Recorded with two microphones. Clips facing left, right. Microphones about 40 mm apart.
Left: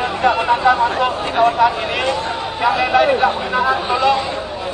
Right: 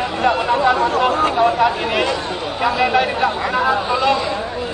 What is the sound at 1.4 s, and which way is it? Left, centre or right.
Speech, centre.